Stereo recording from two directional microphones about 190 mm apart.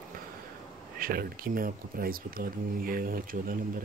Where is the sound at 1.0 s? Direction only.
50° right (ahead or behind).